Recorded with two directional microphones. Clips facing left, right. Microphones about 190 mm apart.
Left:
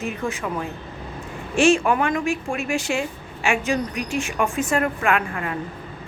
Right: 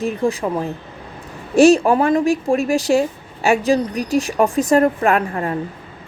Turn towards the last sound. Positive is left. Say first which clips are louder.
# right 5 dB
turn(degrees=-35)  # may be behind; listen again after turning